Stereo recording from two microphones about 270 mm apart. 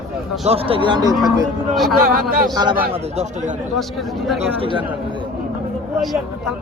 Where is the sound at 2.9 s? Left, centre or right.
Right.